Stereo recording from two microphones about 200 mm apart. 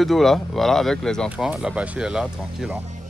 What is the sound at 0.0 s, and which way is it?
Speech, centre (ahead or behind).